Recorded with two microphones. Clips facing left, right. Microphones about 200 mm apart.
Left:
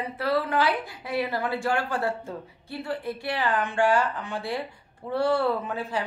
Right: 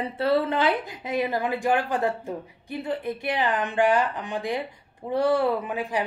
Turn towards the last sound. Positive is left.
turn(degrees=-15)  # may be behind; listen again after turning